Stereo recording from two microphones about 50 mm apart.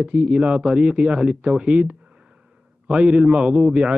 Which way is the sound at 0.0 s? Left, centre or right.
Right.